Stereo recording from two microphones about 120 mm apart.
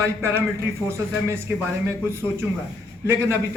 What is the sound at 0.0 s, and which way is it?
A man's voice, 20° right (ahead or behind).